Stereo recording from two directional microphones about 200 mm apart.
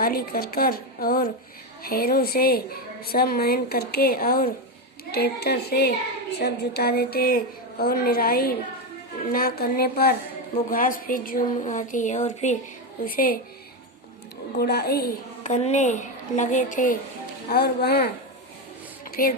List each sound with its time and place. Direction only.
0.0 s a woman's voice: 50° left (ahead or behind)
14.6 s a woman's voice: 50° left (ahead or behind)
15.4 s a woman's voice: 35° left (ahead or behind)
17.5 s a woman's voice: 50° left (ahead or behind)
19.0 s a sound: 45° left (ahead or behind)